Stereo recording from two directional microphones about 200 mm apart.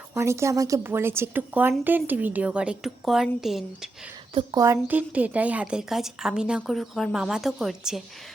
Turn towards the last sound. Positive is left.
turn(degrees=0)  # may be behind; listen again after turning